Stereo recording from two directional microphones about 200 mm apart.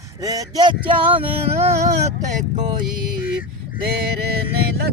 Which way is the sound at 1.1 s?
30° right (ahead or behind).